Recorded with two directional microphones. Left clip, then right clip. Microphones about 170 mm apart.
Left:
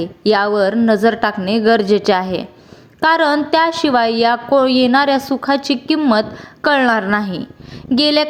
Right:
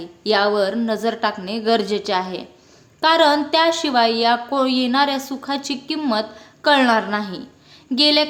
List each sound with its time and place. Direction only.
0.0 s a woman's voice: 35° left (ahead or behind)